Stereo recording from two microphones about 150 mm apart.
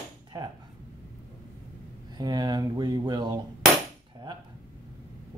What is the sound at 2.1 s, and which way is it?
Speech, 25° right (ahead or behind).